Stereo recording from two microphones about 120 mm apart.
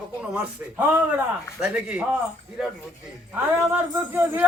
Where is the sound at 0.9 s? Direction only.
10° right (ahead or behind).